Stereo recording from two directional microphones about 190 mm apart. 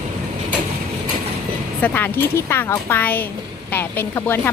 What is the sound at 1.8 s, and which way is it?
Speech, 10° left (ahead or behind).